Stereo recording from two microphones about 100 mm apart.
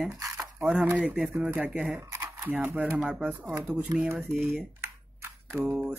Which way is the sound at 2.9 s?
10° right (ahead or behind).